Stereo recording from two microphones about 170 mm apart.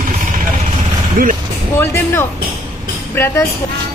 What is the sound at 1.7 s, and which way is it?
Speech, 15° left (ahead or behind).